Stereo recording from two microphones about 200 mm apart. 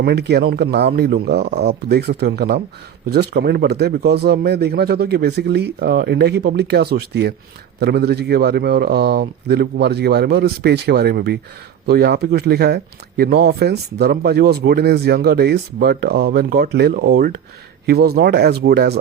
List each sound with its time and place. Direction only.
0.0 s a man's voice: 55° right (ahead or behind)